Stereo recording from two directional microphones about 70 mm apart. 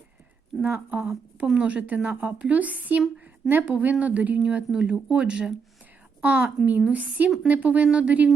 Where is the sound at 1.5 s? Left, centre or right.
Centre.